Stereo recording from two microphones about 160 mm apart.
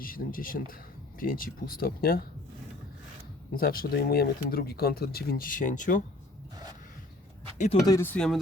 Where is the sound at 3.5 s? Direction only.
70° left (ahead or behind); by 6.0 s 55° left (ahead or behind).